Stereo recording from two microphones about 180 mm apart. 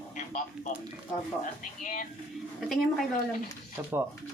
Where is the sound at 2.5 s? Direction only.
Centre (ahead or behind).